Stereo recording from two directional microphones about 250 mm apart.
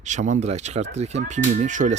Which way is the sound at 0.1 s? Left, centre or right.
Right.